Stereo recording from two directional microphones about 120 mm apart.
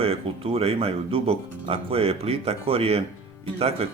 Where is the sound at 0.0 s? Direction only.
55° right (ahead or behind).